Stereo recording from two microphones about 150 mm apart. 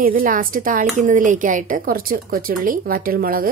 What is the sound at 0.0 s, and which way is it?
A woman's voice, 70° right (ahead or behind).